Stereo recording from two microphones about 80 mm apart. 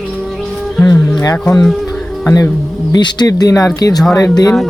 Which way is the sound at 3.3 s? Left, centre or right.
Left.